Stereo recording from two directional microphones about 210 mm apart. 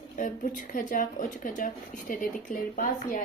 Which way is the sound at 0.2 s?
40° left (ahead or behind).